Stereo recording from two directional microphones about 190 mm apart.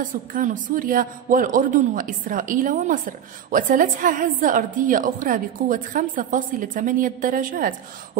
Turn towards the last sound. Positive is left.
turn(degrees=-45)  # may be behind; listen again after turning